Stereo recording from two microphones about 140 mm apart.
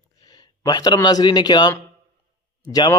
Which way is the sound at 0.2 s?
30° left (ahead or behind).